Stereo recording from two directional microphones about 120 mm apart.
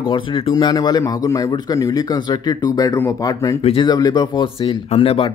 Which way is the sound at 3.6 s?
55° left (ahead or behind).